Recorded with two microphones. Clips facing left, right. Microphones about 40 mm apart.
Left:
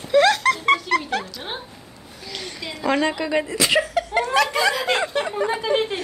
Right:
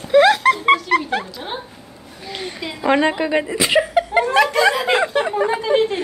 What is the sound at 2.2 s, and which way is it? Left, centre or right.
A woman's voice, right.